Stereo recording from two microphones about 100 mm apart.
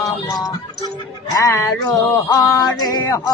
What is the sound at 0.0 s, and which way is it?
Music, 35° left (ahead or behind).